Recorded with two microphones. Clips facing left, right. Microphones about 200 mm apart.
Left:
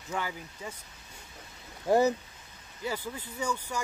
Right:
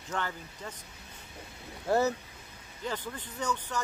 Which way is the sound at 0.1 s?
10° left (ahead or behind).